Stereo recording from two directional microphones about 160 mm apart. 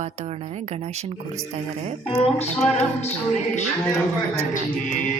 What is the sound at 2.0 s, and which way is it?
Speech, 40° left (ahead or behind).